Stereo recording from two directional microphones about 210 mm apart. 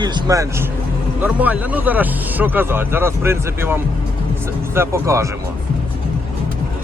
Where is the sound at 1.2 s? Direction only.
10° right (ahead or behind).